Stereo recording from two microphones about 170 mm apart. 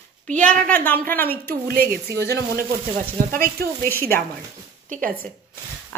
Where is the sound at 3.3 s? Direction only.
55° right (ahead or behind).